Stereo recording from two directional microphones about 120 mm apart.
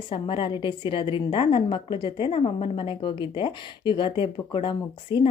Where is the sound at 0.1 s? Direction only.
45° left (ahead or behind).